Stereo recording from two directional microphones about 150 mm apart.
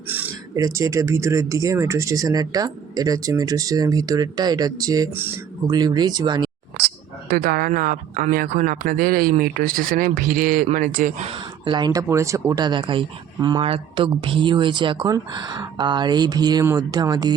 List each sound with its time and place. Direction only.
0.5 s speech: 20° right (ahead or behind)
5.1 s speech: 15° right (ahead or behind)
5.7 s speech: 25° right (ahead or behind)
6.7 s speech: 90° right; by 11.3 s 65° right (ahead or behind)
11.3 s speech: 35° right (ahead or behind)